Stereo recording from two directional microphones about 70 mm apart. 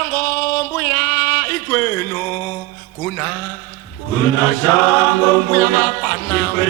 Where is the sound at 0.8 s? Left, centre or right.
Left.